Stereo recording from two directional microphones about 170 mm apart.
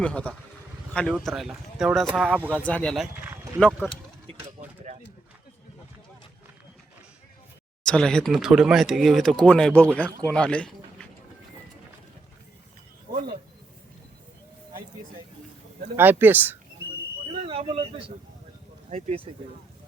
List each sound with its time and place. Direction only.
0.0 s speech: 5° left (ahead or behind)
3.2 s clip-clop: 15° right (ahead or behind)
3.7 s speech: 5° right (ahead or behind)
4.6 s a sound: 40° right (ahead or behind)
7.9 s speech: 5° left (ahead or behind)
16.0 s speech: 10° right (ahead or behind)
17.4 s a sound: 35° right (ahead or behind)
18.9 s speech: 40° right (ahead or behind)